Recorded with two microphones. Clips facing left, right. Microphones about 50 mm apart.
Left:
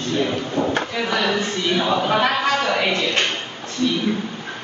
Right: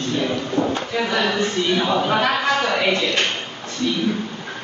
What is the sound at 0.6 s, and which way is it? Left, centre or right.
Speech, centre.